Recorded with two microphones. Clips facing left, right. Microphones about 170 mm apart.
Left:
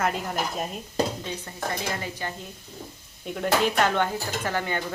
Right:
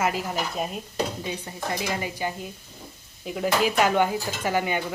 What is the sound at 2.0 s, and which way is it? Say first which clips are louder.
Speech: right 4 dB; 10° right (ahead or behind).